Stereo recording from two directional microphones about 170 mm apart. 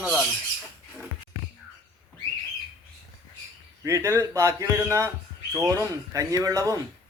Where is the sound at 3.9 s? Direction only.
15° right (ahead or behind).